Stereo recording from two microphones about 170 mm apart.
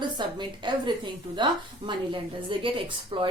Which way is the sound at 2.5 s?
30° right (ahead or behind).